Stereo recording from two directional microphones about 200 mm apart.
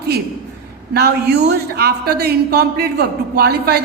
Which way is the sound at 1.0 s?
55° right (ahead or behind).